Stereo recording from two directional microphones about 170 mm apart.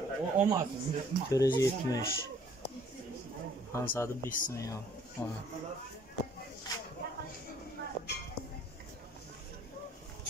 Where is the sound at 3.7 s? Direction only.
15° left (ahead or behind).